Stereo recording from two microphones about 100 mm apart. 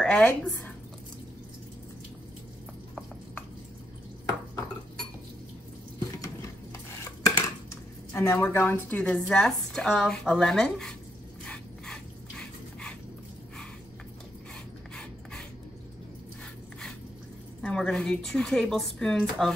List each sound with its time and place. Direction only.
0.0 s speech: 10° left (ahead or behind)
6.1 s a sound: 35° left (ahead or behind)
7.2 s dishes: 35° left (ahead or behind)
8.1 s speech: 25° left (ahead or behind); by 11.0 s 5° left (ahead or behind)
11.4 s dog: 10° left (ahead or behind)
17.6 s a woman's voice: 10° left (ahead or behind)